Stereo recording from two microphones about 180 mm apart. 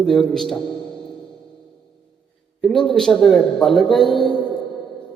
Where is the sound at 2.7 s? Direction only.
5° left (ahead or behind).